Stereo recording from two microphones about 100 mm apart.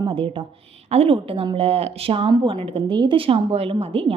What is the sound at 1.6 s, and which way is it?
A woman's voice, 85° right.